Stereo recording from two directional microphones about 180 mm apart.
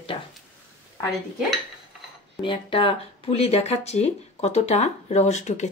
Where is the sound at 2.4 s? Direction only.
30° left (ahead or behind).